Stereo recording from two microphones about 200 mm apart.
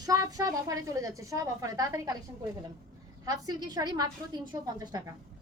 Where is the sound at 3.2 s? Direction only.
20° right (ahead or behind).